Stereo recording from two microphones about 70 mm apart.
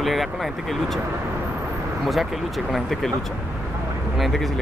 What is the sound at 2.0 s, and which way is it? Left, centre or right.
Speech, centre.